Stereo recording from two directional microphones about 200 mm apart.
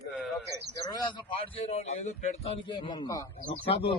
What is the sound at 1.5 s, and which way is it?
Speech, 30° left (ahead or behind).